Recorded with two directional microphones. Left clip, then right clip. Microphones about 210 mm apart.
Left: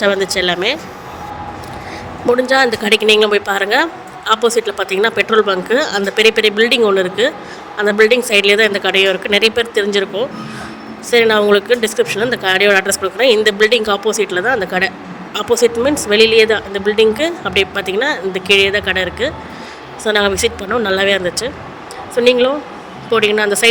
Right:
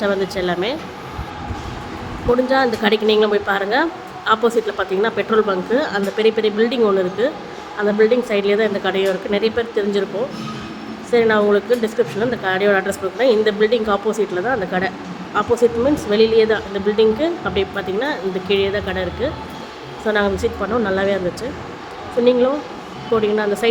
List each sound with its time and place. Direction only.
0.0 s speech: 40° left (ahead or behind)
2.3 s speech: 40° left (ahead or behind)